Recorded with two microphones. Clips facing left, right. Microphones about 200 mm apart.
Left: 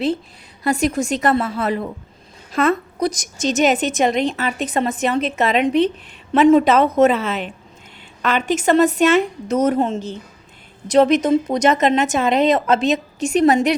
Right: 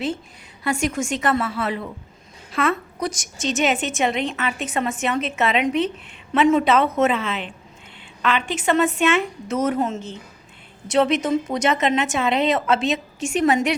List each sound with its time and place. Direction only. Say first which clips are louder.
0.6 s a woman's voice: left 4 dB; 35° left (ahead or behind)